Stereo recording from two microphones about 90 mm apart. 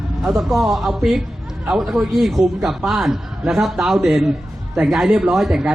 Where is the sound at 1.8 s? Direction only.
15° right (ahead or behind).